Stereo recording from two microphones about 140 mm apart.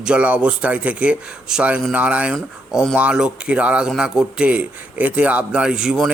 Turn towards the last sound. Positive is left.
turn(degrees=-5)  # may be behind; listen again after turning